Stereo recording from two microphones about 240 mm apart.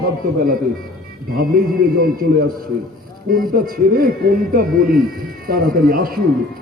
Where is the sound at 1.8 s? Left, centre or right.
Right.